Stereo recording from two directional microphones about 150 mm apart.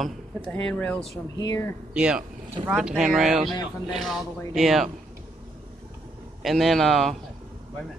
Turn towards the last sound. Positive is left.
turn(degrees=0)  # may be behind; listen again after turning